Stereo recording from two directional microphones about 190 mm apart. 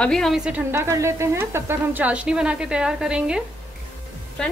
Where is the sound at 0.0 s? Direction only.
5° left (ahead or behind).